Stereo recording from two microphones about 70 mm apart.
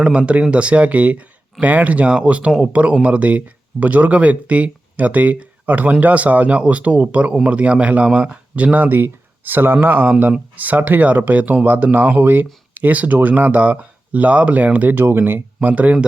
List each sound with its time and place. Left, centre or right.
0.0 s speech: centre
15.0 s speech: right